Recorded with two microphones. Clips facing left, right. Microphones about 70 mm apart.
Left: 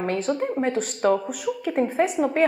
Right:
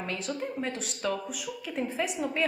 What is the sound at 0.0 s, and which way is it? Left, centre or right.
A woman's voice, left.